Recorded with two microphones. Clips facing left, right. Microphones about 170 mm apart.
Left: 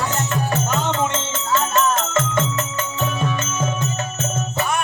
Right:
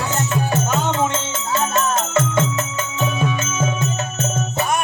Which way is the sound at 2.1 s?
5° right (ahead or behind).